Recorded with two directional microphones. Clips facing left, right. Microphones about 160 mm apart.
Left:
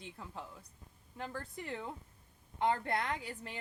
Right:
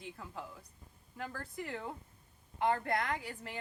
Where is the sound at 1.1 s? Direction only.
20° left (ahead or behind).